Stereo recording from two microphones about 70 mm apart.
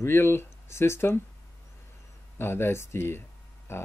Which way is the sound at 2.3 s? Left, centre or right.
Left.